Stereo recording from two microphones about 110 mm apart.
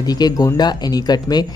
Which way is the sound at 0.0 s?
35° left (ahead or behind).